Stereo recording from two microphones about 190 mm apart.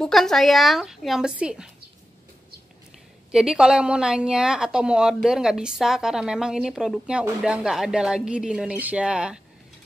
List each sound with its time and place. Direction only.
0.0 s a woman's voice: centre (ahead or behind)
3.3 s a woman's voice: 5° right (ahead or behind)